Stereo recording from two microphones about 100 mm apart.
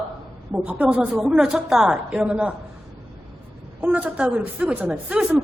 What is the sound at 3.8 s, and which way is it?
A woman's voice, 10° right (ahead or behind).